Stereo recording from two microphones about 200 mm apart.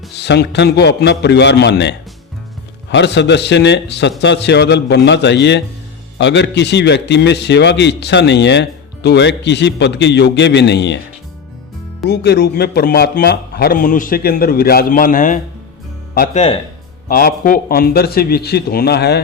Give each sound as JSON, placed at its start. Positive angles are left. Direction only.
{"t": 0.2, "sound": "a man's voice", "side_deg": 55}
{"t": 12.0, "sound": "a man's voice", "side_deg": 55}